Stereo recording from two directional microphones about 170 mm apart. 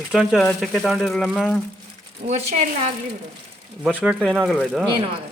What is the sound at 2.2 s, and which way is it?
Speech, 40° right (ahead or behind).